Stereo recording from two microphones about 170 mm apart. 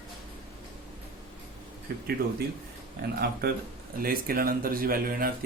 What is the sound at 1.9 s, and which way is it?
Speech, 65° right (ahead or behind).